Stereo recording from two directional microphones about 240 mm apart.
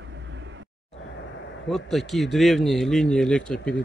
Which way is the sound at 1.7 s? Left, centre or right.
Centre.